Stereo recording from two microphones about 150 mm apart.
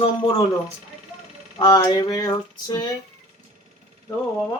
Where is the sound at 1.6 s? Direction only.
30° left (ahead or behind).